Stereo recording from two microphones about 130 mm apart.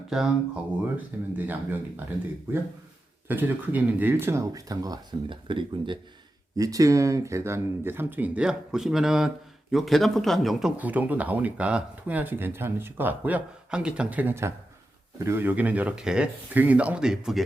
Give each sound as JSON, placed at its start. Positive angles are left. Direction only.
{"t": 0.1, "sound": "speech", "side_deg": -5}
{"t": 3.2, "sound": "speech", "side_deg": -15}
{"t": 6.6, "sound": "speech", "side_deg": -25}
{"t": 10.8, "sound": "speech", "side_deg": -10}